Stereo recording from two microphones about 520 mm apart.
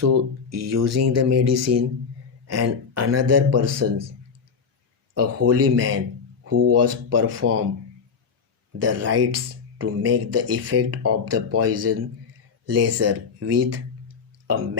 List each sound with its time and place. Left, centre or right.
0.0 s speech: right
5.1 s speech: right
8.8 s speech: right